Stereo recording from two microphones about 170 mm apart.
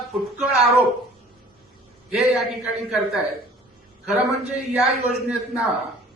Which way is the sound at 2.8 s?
Centre (ahead or behind).